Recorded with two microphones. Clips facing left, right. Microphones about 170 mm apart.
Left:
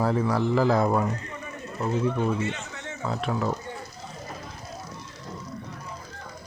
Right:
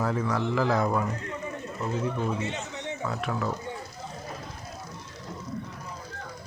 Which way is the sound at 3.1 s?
25° left (ahead or behind).